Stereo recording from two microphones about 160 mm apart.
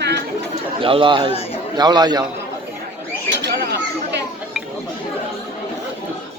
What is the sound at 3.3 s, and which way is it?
Bird, 85° right.